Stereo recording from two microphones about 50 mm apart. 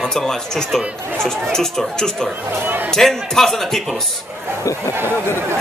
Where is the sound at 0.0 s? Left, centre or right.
Centre.